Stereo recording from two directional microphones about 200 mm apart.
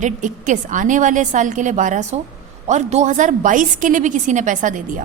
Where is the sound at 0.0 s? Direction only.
40° right (ahead or behind).